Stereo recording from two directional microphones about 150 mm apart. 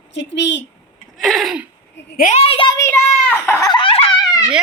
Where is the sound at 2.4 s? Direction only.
40° left (ahead or behind).